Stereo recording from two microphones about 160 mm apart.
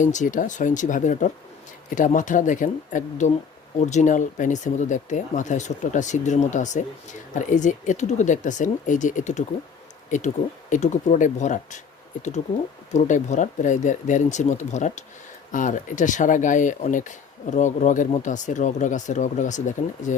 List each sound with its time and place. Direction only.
0.0 s speech: 50° left (ahead or behind)
12.9 s speech: 50° left (ahead or behind)